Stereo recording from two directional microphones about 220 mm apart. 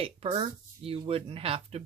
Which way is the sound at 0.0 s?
25° right (ahead or behind).